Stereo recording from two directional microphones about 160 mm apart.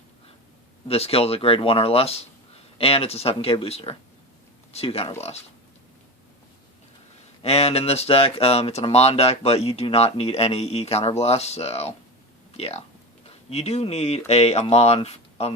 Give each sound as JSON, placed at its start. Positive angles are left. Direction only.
{"t": 0.9, "sound": "speech", "side_deg": 40}
{"t": 7.4, "sound": "speech", "side_deg": 40}